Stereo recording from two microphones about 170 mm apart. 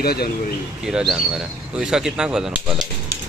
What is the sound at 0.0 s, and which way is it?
Speech, 65° left (ahead or behind).